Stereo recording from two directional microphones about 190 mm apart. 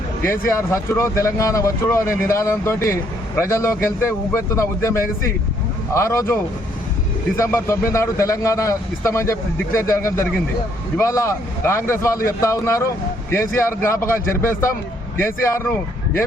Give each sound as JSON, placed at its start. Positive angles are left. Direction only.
{"t": 0.2, "sound": "a man's voice", "side_deg": 15}
{"t": 7.3, "sound": "a man's voice", "side_deg": 15}
{"t": 15.2, "sound": "a man's voice", "side_deg": 15}